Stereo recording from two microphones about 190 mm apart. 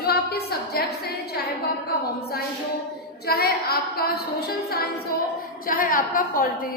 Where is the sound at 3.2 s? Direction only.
55° left (ahead or behind).